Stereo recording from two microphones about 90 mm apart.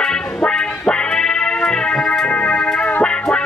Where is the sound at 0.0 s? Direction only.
10° left (ahead or behind).